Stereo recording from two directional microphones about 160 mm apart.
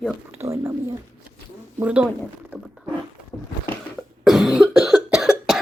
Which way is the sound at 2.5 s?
5° right (ahead or behind).